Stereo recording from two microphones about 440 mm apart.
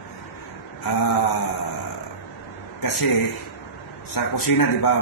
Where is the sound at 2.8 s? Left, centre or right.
Left.